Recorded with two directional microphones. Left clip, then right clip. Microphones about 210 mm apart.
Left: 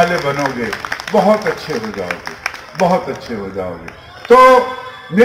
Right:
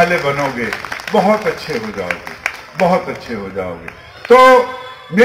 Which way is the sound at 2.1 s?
40° right (ahead or behind).